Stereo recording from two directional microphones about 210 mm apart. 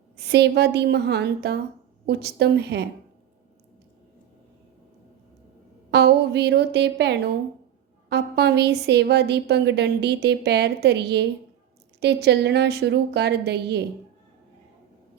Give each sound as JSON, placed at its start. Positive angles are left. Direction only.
{"t": 0.2, "sound": "a woman's voice", "side_deg": -55}
{"t": 5.9, "sound": "a woman's voice", "side_deg": -55}